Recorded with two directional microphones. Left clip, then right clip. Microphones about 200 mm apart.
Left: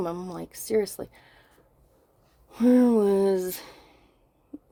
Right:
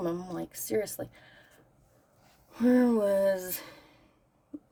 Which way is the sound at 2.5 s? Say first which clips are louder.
Left 4 dB; 30° left (ahead or behind).